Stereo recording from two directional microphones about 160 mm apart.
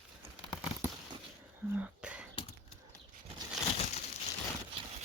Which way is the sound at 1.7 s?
10° right (ahead or behind).